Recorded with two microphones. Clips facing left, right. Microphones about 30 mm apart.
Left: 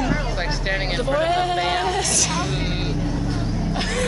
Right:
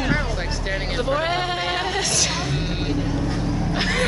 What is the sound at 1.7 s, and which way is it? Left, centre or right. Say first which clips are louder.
Female singing: left 1 dB; centre.